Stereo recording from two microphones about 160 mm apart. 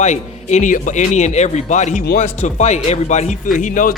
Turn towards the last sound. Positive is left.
turn(degrees=55)  # may be behind; listen again after turning